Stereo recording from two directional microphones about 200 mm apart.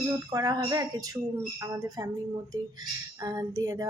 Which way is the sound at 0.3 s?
20° right (ahead or behind).